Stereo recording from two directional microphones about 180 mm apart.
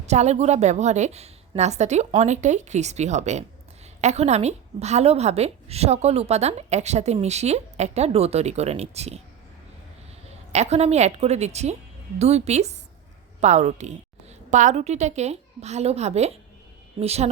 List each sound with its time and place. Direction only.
0.0 s a woman's voice: 40° right (ahead or behind)
10.5 s a woman's voice: 40° right (ahead or behind)